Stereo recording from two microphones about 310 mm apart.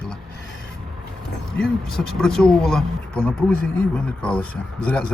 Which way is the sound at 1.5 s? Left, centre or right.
Centre.